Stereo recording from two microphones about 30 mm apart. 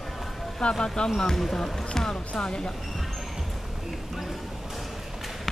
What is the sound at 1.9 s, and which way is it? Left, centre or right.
Basketball bounce, centre.